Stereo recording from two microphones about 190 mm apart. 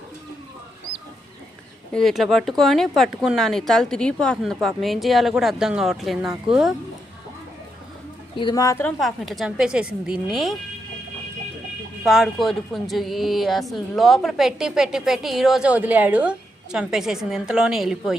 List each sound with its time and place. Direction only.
1.9 s speech: centre (ahead or behind)
8.4 s speech: 20° left (ahead or behind)
9.0 s speech: centre (ahead or behind)
12.0 s speech: centre (ahead or behind)